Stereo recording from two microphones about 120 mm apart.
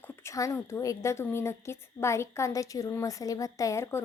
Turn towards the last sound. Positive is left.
turn(degrees=25)  # may be behind; listen again after turning